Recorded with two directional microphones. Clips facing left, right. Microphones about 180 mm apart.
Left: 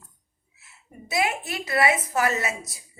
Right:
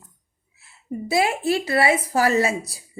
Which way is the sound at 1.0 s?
30° right (ahead or behind).